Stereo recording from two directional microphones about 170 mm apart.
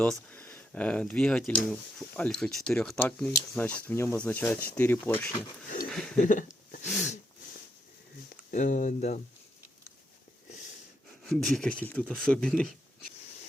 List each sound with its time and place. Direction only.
0.0 s speech: 10° left (ahead or behind)
6.1 s a sound: 50° left (ahead or behind)
8.3 s speech: 45° left (ahead or behind)
11.3 s speech: centre (ahead or behind)